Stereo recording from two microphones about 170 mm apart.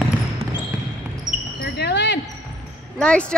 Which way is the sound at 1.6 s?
80° left.